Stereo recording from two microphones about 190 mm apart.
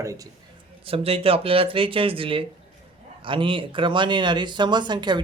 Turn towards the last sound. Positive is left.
turn(degrees=-25)  # may be behind; listen again after turning